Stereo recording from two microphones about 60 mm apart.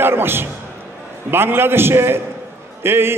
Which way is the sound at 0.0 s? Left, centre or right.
Right.